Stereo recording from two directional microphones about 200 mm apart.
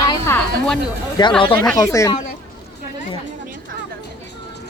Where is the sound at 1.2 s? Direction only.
20° left (ahead or behind).